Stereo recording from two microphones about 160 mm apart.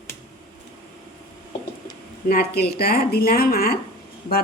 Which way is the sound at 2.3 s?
75° left (ahead or behind).